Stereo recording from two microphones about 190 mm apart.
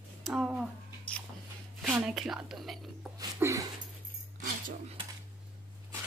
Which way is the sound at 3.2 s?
15° right (ahead or behind).